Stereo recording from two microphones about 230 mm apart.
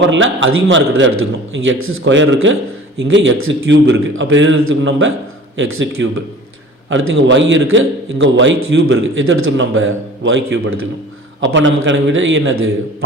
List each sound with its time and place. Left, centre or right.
0.1 s a man's voice: right